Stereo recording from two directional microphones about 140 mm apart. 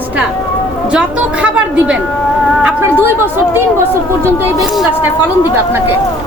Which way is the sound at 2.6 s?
10° right (ahead or behind).